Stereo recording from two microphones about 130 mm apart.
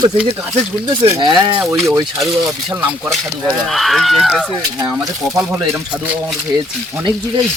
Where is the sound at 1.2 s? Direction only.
35° right (ahead or behind).